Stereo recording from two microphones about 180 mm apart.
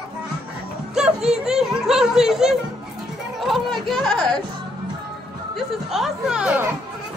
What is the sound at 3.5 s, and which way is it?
Chatter, centre (ahead or behind).